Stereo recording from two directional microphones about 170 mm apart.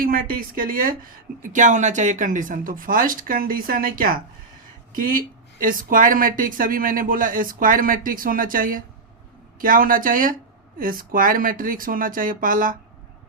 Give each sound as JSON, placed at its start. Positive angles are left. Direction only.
{"t": 0.0, "sound": "speech", "side_deg": -60}